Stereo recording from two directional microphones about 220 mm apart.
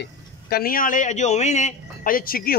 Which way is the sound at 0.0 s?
45° left (ahead or behind).